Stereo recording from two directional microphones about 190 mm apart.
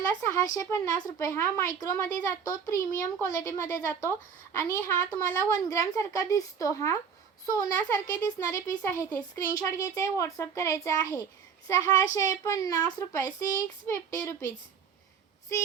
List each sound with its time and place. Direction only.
0.3 s speech: 15° left (ahead or behind)